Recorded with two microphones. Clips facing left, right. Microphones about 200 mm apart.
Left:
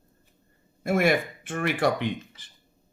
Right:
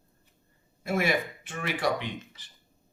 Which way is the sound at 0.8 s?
50° left (ahead or behind).